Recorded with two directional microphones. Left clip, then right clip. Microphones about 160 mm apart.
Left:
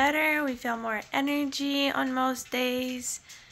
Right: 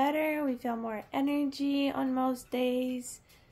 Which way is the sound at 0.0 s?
15° right (ahead or behind).